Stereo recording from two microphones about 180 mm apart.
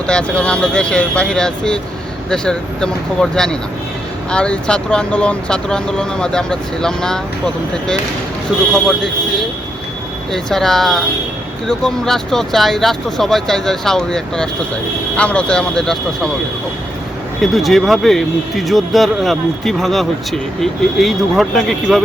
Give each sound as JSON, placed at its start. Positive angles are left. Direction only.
{"t": 0.1, "sound": "speech", "side_deg": 5}
{"t": 10.3, "sound": "speech", "side_deg": 0}
{"t": 17.4, "sound": "speech", "side_deg": 0}